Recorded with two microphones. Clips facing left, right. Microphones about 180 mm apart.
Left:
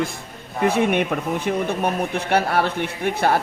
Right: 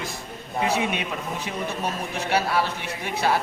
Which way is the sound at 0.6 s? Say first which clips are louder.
Left 7 dB; 55° left (ahead or behind).